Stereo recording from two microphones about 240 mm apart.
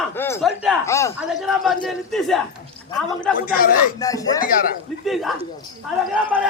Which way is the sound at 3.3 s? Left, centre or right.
Left.